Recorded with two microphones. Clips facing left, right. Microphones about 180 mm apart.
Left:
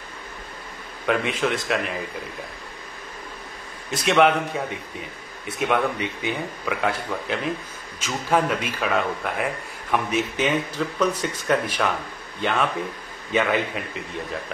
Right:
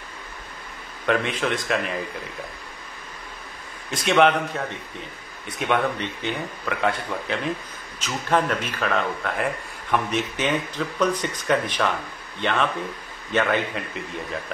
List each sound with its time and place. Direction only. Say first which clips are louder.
1.0 s speech: even; centre (ahead or behind)
3.9 s a man's voice: even; centre (ahead or behind)